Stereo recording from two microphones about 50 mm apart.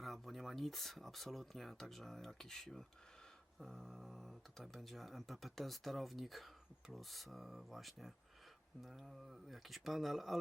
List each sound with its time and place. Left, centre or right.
0.0 s speech: centre